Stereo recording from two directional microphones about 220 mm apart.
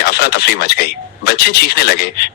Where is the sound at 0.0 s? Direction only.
45° left (ahead or behind).